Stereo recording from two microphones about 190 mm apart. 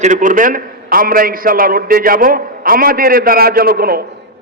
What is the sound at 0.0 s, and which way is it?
A man's voice, 40° right (ahead or behind).